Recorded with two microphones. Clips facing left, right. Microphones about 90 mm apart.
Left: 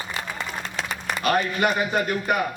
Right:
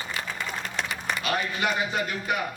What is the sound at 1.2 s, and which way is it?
A man's voice, 50° left (ahead or behind).